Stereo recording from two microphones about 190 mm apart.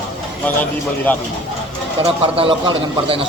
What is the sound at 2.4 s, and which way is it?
Speech, 30° right (ahead or behind).